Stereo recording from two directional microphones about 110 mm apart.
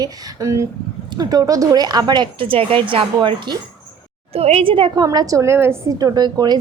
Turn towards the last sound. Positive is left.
turn(degrees=-40)  # may be behind; listen again after turning